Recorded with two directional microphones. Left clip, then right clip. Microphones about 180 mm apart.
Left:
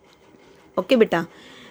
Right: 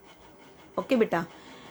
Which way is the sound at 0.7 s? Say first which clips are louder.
Left 7 dB; 40° left (ahead or behind).